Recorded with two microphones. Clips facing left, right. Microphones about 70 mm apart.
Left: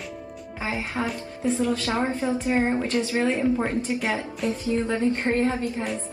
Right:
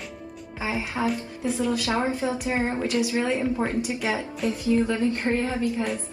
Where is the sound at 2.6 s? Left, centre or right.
Centre.